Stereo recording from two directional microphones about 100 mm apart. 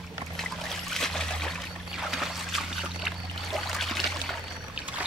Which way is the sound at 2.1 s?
5° right (ahead or behind).